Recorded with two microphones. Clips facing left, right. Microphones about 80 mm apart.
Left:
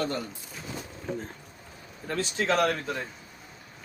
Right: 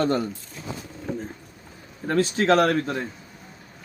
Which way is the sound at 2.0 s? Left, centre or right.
Right.